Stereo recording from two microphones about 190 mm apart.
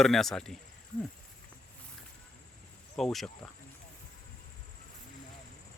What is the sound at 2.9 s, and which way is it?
Speech, centre (ahead or behind).